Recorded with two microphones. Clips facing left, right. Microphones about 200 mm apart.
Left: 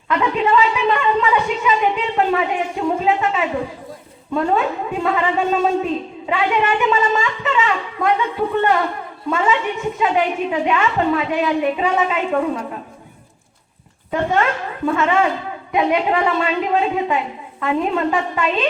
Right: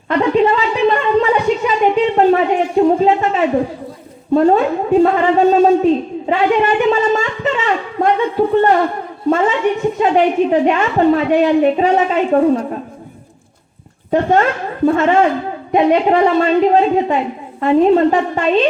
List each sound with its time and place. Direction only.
0.1 s a sound: 40° right (ahead or behind)
9.3 s a woman's voice: 40° right (ahead or behind)
14.1 s a man's voice: 35° right (ahead or behind)